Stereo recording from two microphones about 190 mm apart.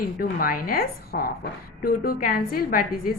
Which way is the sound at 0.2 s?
50° left (ahead or behind).